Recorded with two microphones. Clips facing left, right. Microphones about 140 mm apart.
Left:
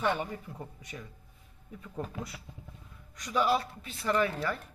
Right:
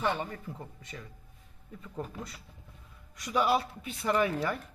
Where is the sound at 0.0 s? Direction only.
Centre (ahead or behind).